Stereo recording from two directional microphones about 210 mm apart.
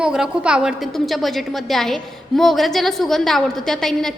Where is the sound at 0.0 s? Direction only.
5° right (ahead or behind).